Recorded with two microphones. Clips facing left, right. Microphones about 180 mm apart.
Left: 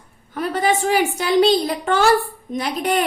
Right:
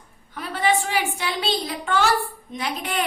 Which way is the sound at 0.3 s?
45° left (ahead or behind).